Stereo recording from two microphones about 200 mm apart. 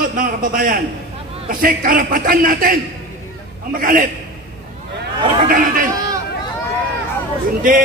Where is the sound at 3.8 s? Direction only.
40° right (ahead or behind).